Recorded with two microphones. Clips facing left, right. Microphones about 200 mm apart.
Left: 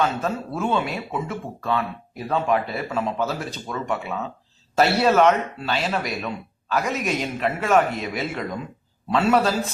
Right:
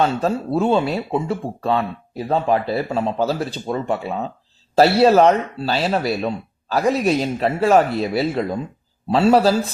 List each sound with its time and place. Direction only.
0.0 s speech: 30° right (ahead or behind)